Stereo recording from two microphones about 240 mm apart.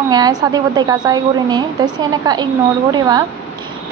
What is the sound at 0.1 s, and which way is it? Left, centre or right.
A woman's voice, centre.